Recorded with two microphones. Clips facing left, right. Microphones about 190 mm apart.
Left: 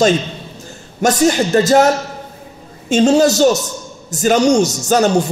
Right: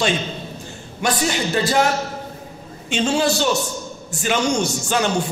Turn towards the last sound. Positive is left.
turn(degrees=40)  # may be behind; listen again after turning